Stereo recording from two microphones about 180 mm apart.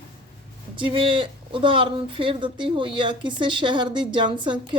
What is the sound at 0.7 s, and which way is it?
Speech, 30° right (ahead or behind).